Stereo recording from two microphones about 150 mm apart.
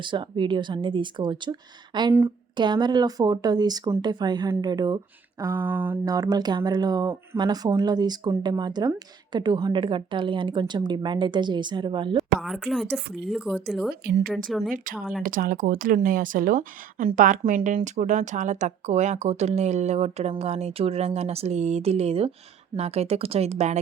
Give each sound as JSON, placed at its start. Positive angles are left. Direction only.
{"t": 0.0, "sound": "speech", "side_deg": -35}
{"t": 12.4, "sound": "speech", "side_deg": 0}
{"t": 15.2, "sound": "a woman's voice", "side_deg": -65}